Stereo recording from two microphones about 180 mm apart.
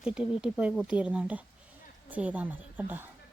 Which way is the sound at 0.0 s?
5° right (ahead or behind).